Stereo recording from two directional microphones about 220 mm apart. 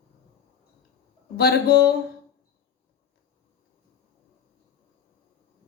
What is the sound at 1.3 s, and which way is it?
Speech, 45° left (ahead or behind).